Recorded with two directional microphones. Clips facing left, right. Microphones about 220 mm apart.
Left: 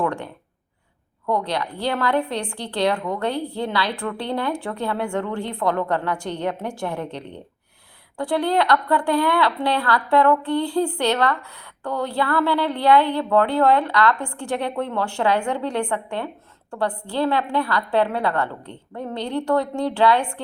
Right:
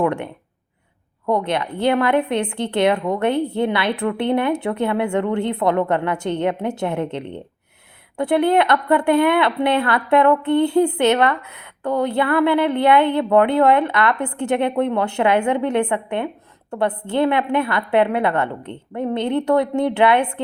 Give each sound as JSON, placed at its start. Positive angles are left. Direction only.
{"t": 0.0, "sound": "a woman's voice", "side_deg": -20}
{"t": 1.3, "sound": "a woman's voice", "side_deg": -20}